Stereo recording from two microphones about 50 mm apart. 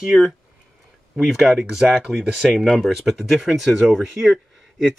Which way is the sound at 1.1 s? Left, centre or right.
Centre.